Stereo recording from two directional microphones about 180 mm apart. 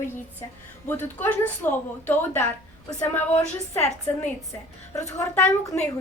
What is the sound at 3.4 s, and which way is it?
Speech, 40° left (ahead or behind).